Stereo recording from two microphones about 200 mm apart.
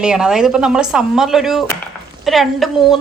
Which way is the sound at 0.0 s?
5° right (ahead or behind).